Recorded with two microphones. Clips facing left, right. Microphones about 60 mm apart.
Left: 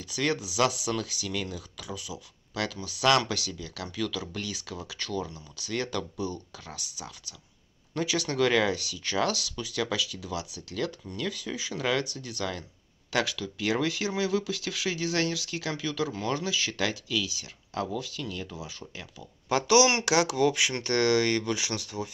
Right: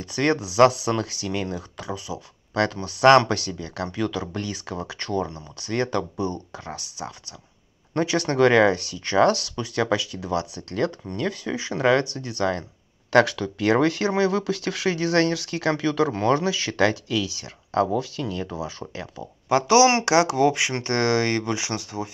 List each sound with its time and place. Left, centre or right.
0.0 s speech: right
19.5 s speech: right